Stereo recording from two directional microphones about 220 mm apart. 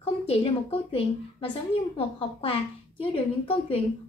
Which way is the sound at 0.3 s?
25° left (ahead or behind).